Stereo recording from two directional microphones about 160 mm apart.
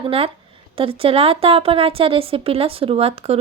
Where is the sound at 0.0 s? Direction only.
35° right (ahead or behind).